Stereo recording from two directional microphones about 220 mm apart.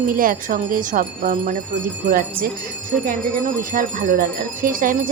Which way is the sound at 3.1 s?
35° right (ahead or behind).